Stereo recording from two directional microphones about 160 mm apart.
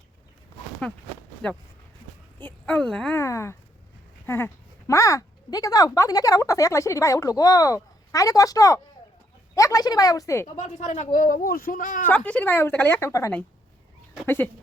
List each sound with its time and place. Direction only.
2.4 s a woman's voice: 10° left (ahead or behind)
3.2 s a woman's voice: 15° left (ahead or behind)
10.6 s speech: 50° left (ahead or behind)
12.0 s a woman's voice: 10° left (ahead or behind)